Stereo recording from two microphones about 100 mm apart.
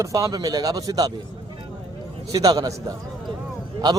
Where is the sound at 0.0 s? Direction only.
35° right (ahead or behind).